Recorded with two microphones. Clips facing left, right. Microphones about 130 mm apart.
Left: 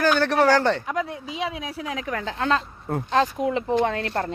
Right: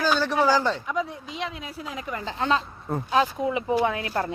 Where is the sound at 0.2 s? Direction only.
65° left (ahead or behind).